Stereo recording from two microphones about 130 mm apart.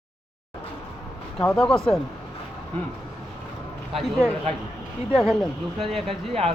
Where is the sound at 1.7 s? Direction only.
5° left (ahead or behind).